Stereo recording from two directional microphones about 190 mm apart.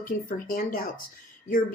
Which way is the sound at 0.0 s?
45° left (ahead or behind).